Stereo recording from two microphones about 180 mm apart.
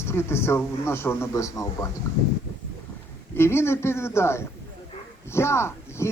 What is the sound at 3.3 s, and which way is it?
A man's voice, 15° left (ahead or behind).